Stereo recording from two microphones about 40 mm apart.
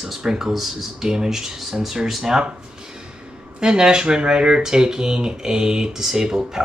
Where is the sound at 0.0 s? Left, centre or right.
Centre.